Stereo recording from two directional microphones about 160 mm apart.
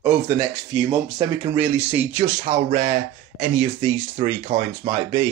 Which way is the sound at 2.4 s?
50° right (ahead or behind).